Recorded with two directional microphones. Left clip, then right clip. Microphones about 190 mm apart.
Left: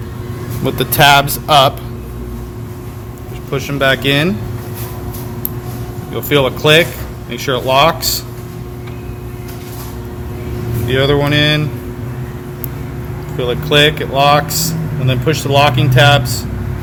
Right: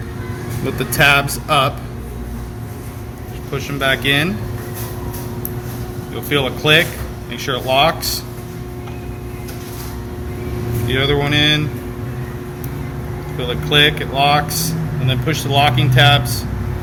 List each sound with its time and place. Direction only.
0.6 s speech: 50° left (ahead or behind)
3.5 s speech: 50° left (ahead or behind)
6.1 s speech: 50° left (ahead or behind)
10.8 s speech: 50° left (ahead or behind)
13.3 s speech: 50° left (ahead or behind)